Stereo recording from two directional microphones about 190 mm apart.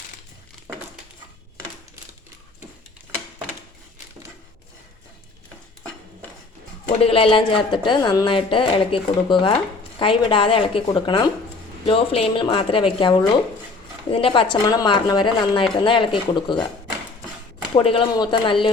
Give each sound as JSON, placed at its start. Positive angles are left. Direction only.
{"t": 7.0, "sound": "speech", "side_deg": 30}
{"t": 17.7, "sound": "speech", "side_deg": 30}